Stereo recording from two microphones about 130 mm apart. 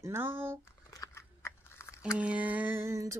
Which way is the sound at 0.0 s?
20° right (ahead or behind).